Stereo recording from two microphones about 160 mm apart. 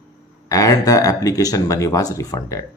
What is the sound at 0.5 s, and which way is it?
Speech, 20° left (ahead or behind).